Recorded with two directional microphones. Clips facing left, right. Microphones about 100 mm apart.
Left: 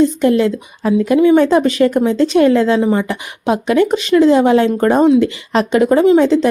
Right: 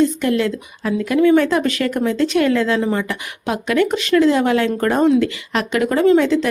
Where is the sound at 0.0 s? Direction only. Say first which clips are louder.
Left 5 dB; 25° left (ahead or behind).